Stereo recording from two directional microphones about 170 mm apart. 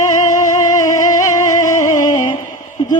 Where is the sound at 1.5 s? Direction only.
25° left (ahead or behind).